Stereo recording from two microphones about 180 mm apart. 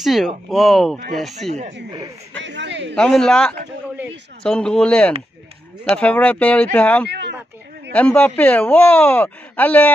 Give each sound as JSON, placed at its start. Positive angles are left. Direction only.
{"t": 0.0, "sound": "speech", "side_deg": 0}
{"t": 1.5, "sound": "speech", "side_deg": -40}
{"t": 1.9, "sound": "speech", "side_deg": -20}
{"t": 2.3, "sound": "a man's voice", "side_deg": -85}
{"t": 3.0, "sound": "speech", "side_deg": 5}